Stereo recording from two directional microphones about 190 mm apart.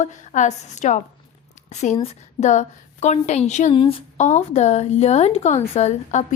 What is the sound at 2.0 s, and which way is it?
A woman's voice, 35° left (ahead or behind).